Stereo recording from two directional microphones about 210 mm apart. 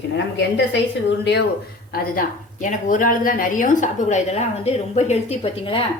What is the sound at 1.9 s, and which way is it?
Speech, 45° left (ahead or behind).